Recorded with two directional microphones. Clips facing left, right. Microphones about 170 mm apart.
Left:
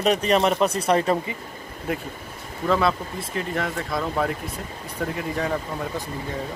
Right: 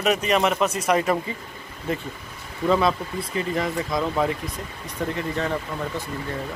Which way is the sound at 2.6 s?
Centre (ahead or behind).